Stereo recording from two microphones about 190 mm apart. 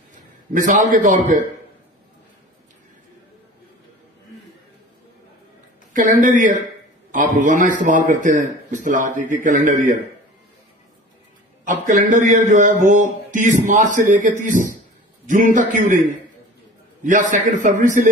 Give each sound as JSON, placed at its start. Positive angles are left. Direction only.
{"t": 0.1, "sound": "a man's voice", "side_deg": -40}
{"t": 5.9, "sound": "a man's voice", "side_deg": -45}
{"t": 11.6, "sound": "a man's voice", "side_deg": -40}